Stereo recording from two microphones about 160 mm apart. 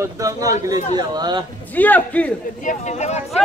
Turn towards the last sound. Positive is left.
turn(degrees=45)  # may be behind; listen again after turning